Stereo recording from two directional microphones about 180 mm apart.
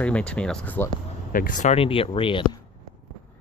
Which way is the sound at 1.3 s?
45° left (ahead or behind).